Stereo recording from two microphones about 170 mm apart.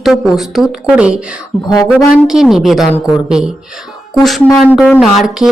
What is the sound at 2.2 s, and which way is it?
Speech, 5° right (ahead or behind).